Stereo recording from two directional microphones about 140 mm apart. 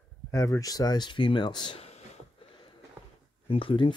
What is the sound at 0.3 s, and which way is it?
Speech, 25° left (ahead or behind).